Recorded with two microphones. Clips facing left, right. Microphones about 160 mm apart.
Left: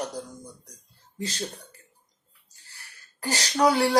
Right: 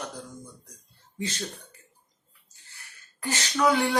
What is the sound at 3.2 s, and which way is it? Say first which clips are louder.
Speech: left 2 dB; 35° left (ahead or behind).